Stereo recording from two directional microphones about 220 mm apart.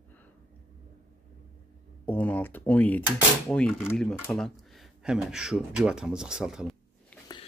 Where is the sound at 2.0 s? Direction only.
5° left (ahead or behind).